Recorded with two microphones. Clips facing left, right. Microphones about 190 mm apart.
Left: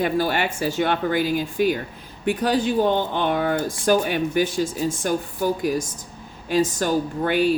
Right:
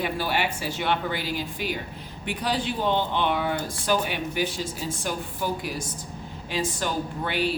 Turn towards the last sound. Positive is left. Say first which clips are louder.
# left 7 dB
turn(degrees=45)  # may be behind; listen again after turning